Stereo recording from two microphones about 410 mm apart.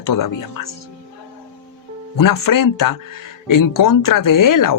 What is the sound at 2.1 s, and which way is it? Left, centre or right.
Speech, left.